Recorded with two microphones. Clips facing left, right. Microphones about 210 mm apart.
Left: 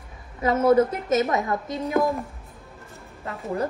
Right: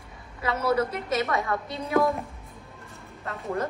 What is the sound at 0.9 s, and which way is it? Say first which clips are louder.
Speech: left 5 dB; 45° left (ahead or behind).